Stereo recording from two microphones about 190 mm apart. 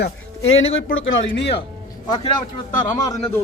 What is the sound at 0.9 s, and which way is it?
Speech, 90° left.